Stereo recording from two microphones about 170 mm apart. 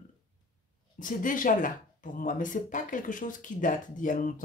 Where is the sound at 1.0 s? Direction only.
50° left (ahead or behind).